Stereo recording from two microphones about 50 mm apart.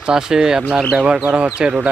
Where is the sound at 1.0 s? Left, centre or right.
Right.